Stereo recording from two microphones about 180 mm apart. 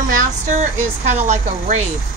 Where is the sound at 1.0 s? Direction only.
40° right (ahead or behind).